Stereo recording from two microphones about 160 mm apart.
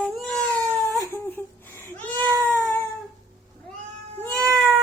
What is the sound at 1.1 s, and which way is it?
Humming, 10° left (ahead or behind).